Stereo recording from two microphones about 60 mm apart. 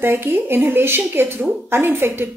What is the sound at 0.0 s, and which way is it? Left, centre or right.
A woman's voice, right.